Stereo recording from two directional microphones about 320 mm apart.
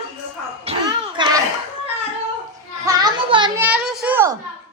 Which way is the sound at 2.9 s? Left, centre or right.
Centre.